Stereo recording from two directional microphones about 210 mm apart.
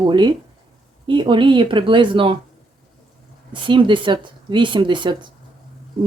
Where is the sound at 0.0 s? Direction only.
20° right (ahead or behind).